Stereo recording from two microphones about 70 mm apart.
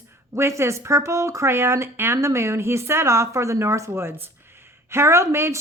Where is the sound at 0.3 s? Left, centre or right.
Right.